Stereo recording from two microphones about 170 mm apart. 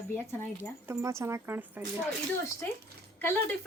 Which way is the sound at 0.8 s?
15° right (ahead or behind).